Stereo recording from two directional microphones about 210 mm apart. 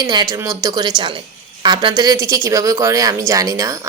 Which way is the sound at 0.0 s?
20° right (ahead or behind).